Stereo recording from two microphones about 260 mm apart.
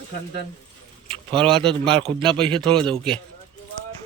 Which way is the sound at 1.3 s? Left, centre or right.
Centre.